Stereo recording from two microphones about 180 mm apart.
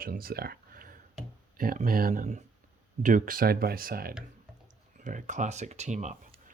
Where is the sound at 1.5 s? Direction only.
50° right (ahead or behind).